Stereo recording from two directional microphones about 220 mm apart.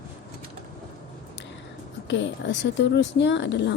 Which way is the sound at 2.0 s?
55° left (ahead or behind).